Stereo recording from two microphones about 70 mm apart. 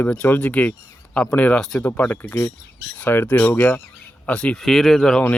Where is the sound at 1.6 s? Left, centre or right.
Centre.